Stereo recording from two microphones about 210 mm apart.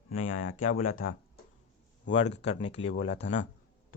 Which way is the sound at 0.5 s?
40° left (ahead or behind).